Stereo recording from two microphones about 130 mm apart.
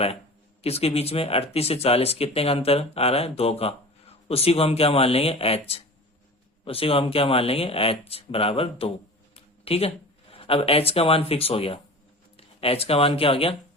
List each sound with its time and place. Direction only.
0.6 s speech: 50° left (ahead or behind)
9.3 s a sound: 50° left (ahead or behind)
10.3 s speech: 45° left (ahead or behind)